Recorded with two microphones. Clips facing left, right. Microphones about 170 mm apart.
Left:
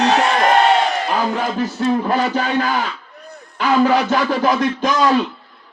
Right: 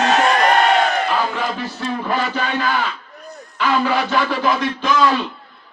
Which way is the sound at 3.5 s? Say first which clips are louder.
Left 4 dB; 40° left (ahead or behind).